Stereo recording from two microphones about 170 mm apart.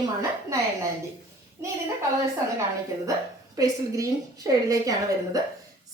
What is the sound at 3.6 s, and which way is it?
A woman's voice, 20° right (ahead or behind).